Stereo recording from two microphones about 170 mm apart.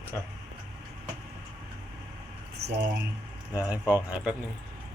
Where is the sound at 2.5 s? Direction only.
75° right (ahead or behind).